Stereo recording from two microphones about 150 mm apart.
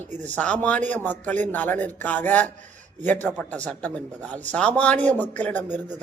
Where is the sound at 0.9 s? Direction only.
10° left (ahead or behind).